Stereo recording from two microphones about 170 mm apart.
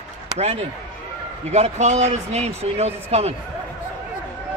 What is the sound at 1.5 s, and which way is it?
A man's voice, 40° right (ahead or behind).